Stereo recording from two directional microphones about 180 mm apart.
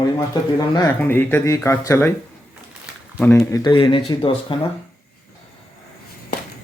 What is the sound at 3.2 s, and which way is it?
Speech, 15° left (ahead or behind).